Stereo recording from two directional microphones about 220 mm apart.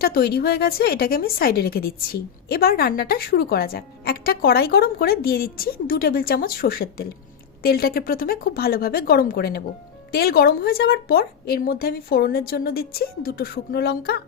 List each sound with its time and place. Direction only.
0.0 s a woman's voice: 45° left (ahead or behind)